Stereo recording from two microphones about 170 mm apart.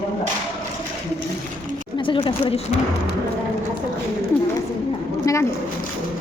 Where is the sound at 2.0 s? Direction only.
30° left (ahead or behind).